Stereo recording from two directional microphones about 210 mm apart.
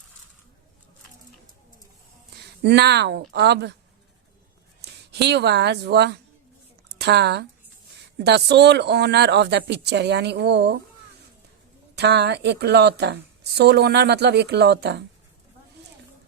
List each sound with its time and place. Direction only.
2.6 s speech: 55° right (ahead or behind)
5.1 s speech: 55° right (ahead or behind)
6.8 s a sound: 50° right (ahead or behind)
8.2 s speech: 55° right (ahead or behind)
11.9 s speech: 50° right (ahead or behind)